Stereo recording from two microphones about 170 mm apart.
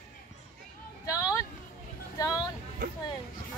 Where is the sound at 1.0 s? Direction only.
20° left (ahead or behind).